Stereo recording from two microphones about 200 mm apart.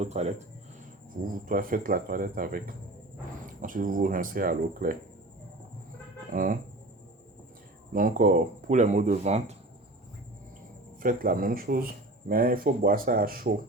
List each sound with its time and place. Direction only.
0.0 s speech: 35° right (ahead or behind)
1.3 s speech: 45° right (ahead or behind)
6.3 s speech: 40° right (ahead or behind)
7.9 s speech: 40° right (ahead or behind)
11.0 s speech: 45° right (ahead or behind)